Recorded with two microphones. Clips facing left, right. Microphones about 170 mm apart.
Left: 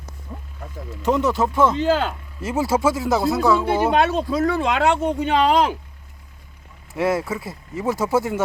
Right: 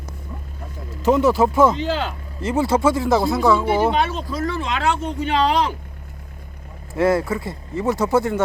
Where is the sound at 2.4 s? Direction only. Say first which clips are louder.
Right 2 dB; 5° left (ahead or behind).